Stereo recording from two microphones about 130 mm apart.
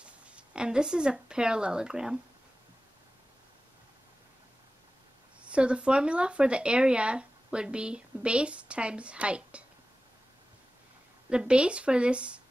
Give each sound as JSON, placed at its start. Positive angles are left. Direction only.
{"t": 0.0, "sound": "speech", "side_deg": -10}
{"t": 5.5, "sound": "speech", "side_deg": -10}
{"t": 11.2, "sound": "speech", "side_deg": -5}